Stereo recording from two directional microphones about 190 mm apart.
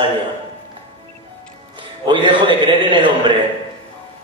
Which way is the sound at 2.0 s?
25° right (ahead or behind).